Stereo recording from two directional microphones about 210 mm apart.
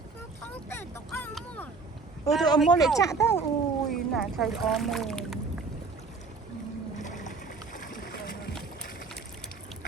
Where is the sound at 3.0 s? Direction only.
15° left (ahead or behind).